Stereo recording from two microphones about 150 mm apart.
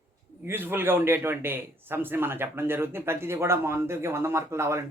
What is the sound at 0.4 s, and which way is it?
A man's voice, 15° right (ahead or behind).